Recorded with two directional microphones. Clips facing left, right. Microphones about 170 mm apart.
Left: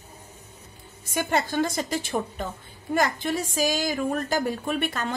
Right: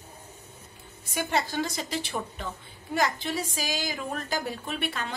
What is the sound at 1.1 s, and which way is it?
Speech, 50° left (ahead or behind).